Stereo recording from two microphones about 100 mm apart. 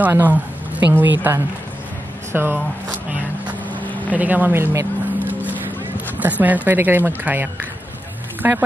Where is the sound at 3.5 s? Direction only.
15° left (ahead or behind).